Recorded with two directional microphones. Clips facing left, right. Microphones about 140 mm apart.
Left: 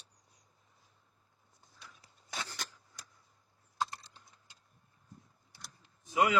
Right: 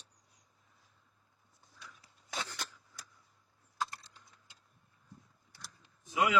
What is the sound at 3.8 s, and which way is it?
Computer keyboard, 25° left (ahead or behind).